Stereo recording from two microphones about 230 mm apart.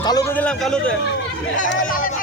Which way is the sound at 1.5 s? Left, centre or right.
Left.